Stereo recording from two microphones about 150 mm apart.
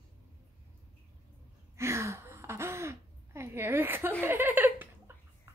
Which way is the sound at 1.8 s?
20° right (ahead or behind).